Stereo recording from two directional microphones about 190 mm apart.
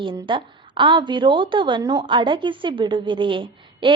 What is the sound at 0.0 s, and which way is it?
A woman's voice, 25° right (ahead or behind).